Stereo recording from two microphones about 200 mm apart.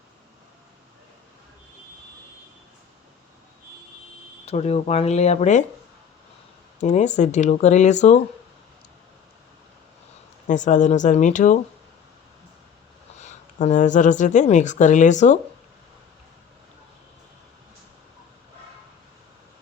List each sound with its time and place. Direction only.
4.4 s speech: 30° left (ahead or behind)
6.8 s speech: 35° left (ahead or behind)
10.4 s speech: 40° left (ahead or behind)
13.6 s speech: 40° left (ahead or behind)